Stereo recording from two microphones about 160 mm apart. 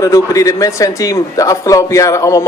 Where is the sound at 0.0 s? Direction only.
20° left (ahead or behind).